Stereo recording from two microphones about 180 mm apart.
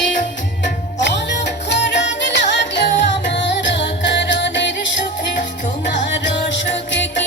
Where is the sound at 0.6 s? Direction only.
75° left (ahead or behind).